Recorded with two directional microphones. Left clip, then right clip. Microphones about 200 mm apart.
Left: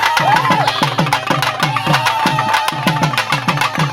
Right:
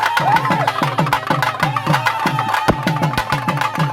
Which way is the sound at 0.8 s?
40° left (ahead or behind).